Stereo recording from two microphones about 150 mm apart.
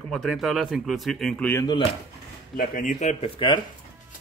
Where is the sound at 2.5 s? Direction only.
65° left (ahead or behind).